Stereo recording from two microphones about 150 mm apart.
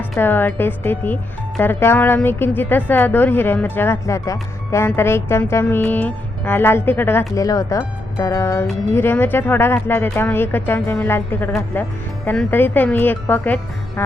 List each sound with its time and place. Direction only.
0.2 s speech: 15° left (ahead or behind)